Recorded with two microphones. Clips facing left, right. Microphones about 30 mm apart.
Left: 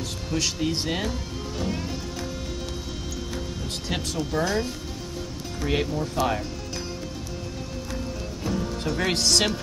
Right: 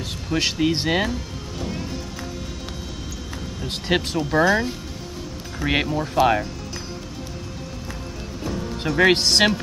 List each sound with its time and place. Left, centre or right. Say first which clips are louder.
0.3 s speech: right 5 dB; right
3.6 s speech: right 10 dB; right
4.5 s speech: right 6 dB; centre
5.6 s speech: right 4 dB; right
8.8 s speech: right 8 dB; right